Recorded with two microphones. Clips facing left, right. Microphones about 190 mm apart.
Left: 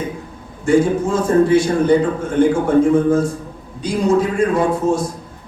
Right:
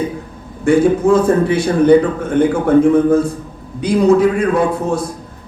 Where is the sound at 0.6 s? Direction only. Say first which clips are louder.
Right 3 dB; 60° right (ahead or behind).